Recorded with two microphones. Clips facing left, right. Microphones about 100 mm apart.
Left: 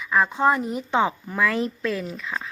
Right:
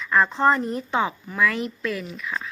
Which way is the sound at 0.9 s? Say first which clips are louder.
Left 2 dB; 25° left (ahead or behind).